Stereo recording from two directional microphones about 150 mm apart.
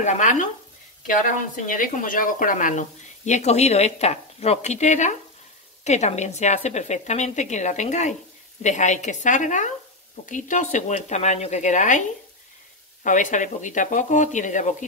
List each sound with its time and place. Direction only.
0.0 s speech: 55° left (ahead or behind)
1.7 s speech: 65° left (ahead or behind)
13.0 s speech: 60° left (ahead or behind)